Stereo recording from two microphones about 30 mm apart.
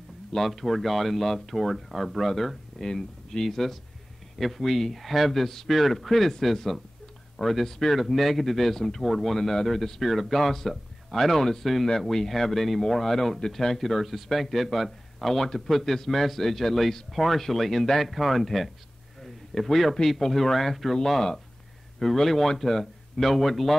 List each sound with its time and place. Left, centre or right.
0.4 s speech: centre
2.8 s speech: centre
3.4 s speech: centre
22.0 s speech: centre